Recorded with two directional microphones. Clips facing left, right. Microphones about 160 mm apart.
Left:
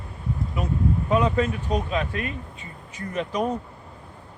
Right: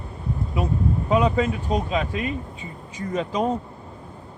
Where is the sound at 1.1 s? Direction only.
15° right (ahead or behind).